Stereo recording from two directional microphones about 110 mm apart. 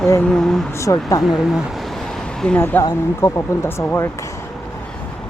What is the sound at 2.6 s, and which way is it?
Speech, 20° left (ahead or behind).